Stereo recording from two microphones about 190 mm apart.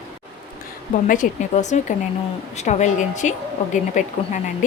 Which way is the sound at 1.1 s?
40° left (ahead or behind).